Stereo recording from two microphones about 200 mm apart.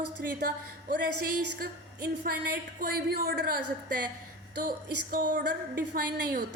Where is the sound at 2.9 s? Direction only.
50° right (ahead or behind).